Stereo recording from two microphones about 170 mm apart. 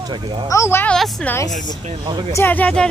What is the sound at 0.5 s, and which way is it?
Speech, 15° left (ahead or behind).